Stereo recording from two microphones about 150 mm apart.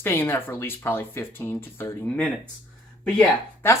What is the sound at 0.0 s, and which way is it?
Speech, 15° left (ahead or behind).